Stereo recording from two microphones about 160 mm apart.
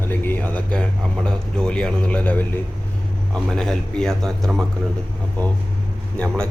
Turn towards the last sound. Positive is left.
turn(degrees=5)  # may be behind; listen again after turning